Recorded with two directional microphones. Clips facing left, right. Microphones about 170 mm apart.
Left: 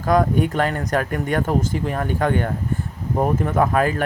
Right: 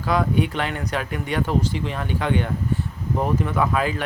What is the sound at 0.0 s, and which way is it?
Speech, 45° left (ahead or behind).